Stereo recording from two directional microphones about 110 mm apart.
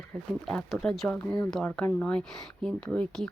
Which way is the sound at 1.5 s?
5° left (ahead or behind).